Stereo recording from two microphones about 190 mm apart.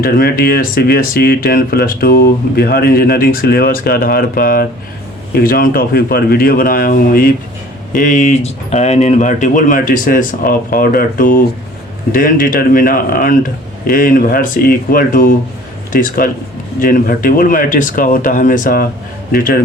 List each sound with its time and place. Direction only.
0.0 s speech: 50° left (ahead or behind)